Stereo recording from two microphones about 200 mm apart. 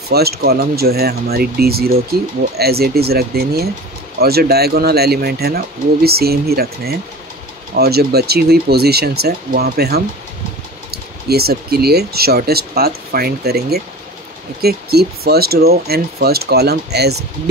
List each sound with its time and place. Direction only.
0.1 s speech: 50° right (ahead or behind)